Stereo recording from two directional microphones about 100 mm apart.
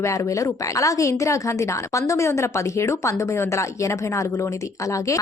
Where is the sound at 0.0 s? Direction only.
30° left (ahead or behind).